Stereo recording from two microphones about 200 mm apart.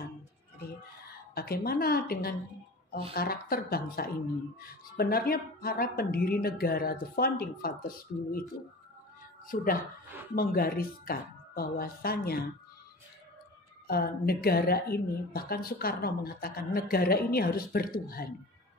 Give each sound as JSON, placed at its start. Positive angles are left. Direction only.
{"t": 1.3, "sound": "a woman's voice", "side_deg": 50}
{"t": 9.5, "sound": "a woman's voice", "side_deg": 45}
{"t": 13.8, "sound": "a woman's voice", "side_deg": 50}